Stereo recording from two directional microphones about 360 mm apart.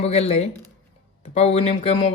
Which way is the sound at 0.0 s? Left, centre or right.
Centre.